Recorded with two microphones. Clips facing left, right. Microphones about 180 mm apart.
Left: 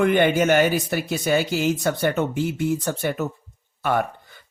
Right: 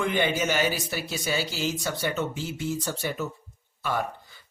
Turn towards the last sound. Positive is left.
turn(degrees=60)  # may be behind; listen again after turning